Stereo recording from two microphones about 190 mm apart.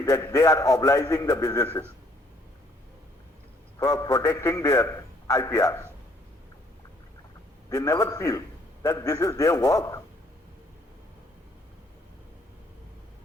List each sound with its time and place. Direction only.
0.0 s a man's voice: 15° left (ahead or behind)
3.8 s a man's voice: 20° left (ahead or behind)
7.7 s a man's voice: 15° left (ahead or behind)